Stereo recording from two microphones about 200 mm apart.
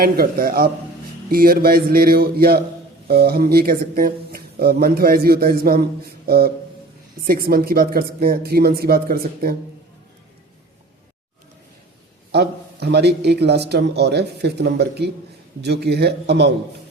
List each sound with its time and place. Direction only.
0.0 s speech: 50° right (ahead or behind)
12.3 s speech: 55° right (ahead or behind)